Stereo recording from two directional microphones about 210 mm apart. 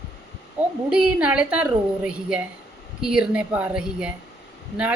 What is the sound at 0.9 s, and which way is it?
A woman's voice, 5° right (ahead or behind).